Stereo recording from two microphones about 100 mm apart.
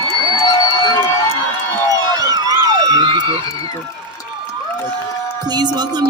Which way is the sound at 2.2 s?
40° right (ahead or behind).